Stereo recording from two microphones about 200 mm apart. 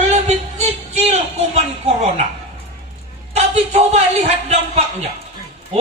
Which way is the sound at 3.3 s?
35° right (ahead or behind).